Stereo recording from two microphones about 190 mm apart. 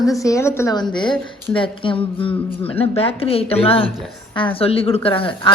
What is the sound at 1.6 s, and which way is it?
A woman's voice, 25° left (ahead or behind).